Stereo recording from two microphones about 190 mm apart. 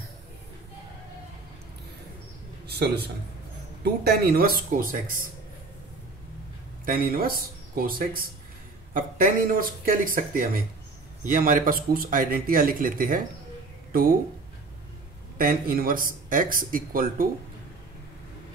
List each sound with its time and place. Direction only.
2.6 s a sound: 60° right (ahead or behind)
3.8 s speech: 55° right (ahead or behind)
6.9 s speech: 50° right (ahead or behind)
15.3 s speech: 50° right (ahead or behind)